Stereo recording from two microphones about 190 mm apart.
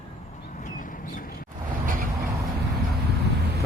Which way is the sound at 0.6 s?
45° left (ahead or behind).